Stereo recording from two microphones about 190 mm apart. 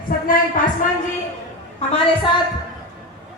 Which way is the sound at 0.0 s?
45° left (ahead or behind).